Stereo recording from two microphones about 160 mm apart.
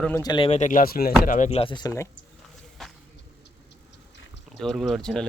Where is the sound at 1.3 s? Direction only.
50° left (ahead or behind).